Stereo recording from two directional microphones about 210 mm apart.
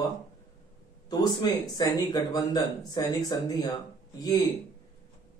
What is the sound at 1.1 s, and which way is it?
Speech, 20° left (ahead or behind).